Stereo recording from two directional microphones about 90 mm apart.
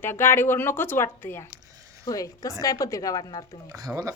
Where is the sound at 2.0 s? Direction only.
40° left (ahead or behind).